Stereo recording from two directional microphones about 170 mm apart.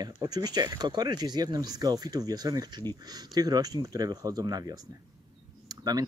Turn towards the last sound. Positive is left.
turn(degrees=-20)  # may be behind; listen again after turning